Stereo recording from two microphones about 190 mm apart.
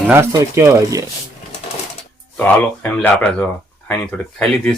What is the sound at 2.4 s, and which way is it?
Speech, 5° left (ahead or behind).